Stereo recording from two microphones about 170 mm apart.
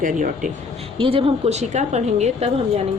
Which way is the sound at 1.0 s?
30° right (ahead or behind).